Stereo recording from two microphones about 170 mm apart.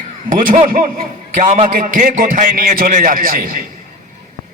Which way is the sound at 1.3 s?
45° right (ahead or behind).